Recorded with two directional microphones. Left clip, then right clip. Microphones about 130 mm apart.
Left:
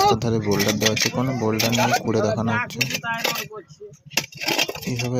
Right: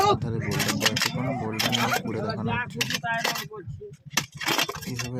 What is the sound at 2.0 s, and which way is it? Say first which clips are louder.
Speech: left 10 dB; 45° left (ahead or behind).